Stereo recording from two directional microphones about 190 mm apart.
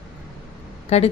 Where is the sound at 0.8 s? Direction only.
35° left (ahead or behind).